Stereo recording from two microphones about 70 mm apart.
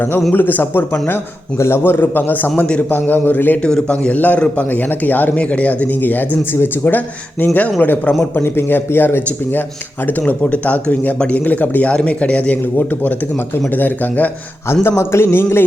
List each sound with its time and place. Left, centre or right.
0.3 s a man's voice: left
3.6 s a man's voice: centre
8.2 s a man's voice: left
14.7 s a man's voice: left